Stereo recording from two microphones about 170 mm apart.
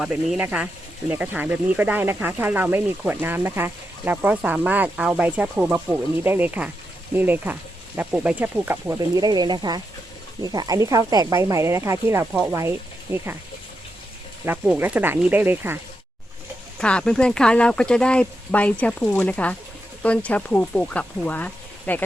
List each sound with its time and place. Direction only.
0.0 s speech: 5° right (ahead or behind)
12.3 s speech: 5° right (ahead or behind)
14.4 s speech: 10° right (ahead or behind)
16.7 s speech: 5° left (ahead or behind)